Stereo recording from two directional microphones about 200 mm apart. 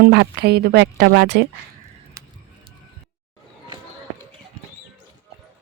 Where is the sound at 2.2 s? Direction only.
15° right (ahead or behind).